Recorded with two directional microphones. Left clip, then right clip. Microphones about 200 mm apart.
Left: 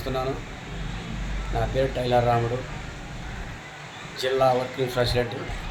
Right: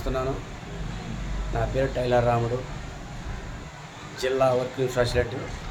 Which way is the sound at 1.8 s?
5° right (ahead or behind).